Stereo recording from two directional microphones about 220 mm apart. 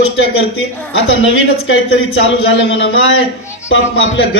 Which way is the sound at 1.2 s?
60° left (ahead or behind).